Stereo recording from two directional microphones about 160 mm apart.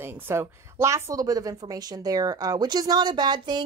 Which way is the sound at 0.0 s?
15° right (ahead or behind).